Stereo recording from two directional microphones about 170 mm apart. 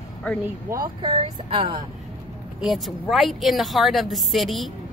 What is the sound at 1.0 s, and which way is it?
Speech, 30° right (ahead or behind).